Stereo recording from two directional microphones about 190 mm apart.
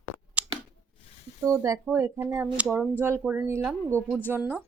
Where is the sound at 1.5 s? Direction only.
15° right (ahead or behind).